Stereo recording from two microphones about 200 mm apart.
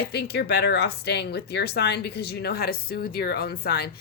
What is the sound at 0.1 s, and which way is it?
Speech, 55° left (ahead or behind).